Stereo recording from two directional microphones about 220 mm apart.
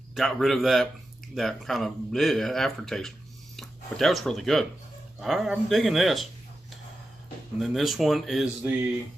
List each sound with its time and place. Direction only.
0.1 s speech: centre (ahead or behind)
7.6 s speech: centre (ahead or behind)